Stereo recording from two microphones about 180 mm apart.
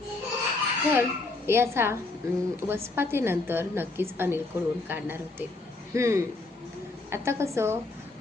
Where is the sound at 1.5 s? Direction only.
15° right (ahead or behind).